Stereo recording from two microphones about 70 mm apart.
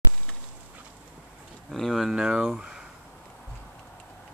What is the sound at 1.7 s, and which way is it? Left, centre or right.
Speech, centre.